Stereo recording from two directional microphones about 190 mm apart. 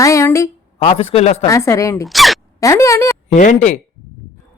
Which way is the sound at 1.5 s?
15° left (ahead or behind).